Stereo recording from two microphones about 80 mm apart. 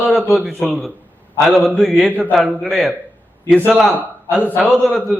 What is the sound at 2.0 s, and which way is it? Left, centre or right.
Speech, centre.